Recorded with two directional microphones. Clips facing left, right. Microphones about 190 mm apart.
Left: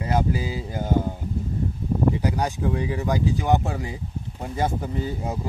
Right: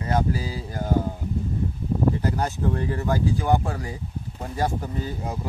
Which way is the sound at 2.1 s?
15° left (ahead or behind).